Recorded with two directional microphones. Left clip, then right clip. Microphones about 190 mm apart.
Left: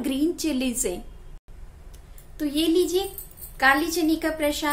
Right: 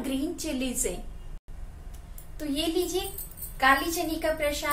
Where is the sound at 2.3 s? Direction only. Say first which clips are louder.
Left 6 dB; 40° left (ahead or behind).